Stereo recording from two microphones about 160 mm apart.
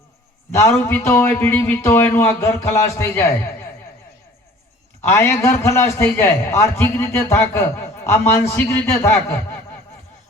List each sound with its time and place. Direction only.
0.5 s a man's voice: 15° left (ahead or behind)
5.0 s a man's voice: 15° left (ahead or behind)